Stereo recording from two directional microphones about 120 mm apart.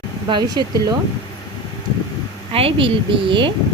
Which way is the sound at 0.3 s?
35° right (ahead or behind).